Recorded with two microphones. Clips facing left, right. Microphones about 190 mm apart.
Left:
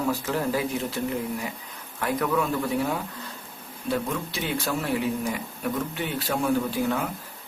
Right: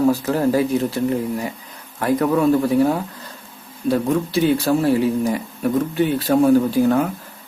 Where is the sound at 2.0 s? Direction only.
35° right (ahead or behind).